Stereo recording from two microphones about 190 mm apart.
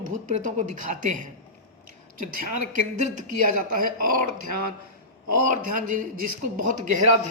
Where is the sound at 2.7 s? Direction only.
45° right (ahead or behind).